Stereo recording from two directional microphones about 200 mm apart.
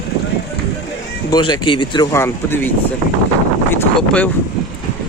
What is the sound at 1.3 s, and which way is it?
Speech, 20° left (ahead or behind).